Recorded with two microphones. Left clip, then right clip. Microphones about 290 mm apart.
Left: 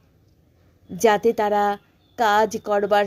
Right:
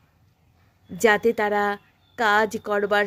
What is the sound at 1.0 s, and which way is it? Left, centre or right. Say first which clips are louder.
A woman's voice: left 1 dB; right.